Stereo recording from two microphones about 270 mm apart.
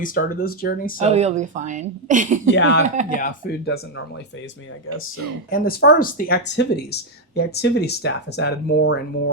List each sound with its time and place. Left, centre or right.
0.0 s speech: left
1.0 s a woman's voice: right
2.5 s speech: left
3.2 s speech: left
5.5 s speech: left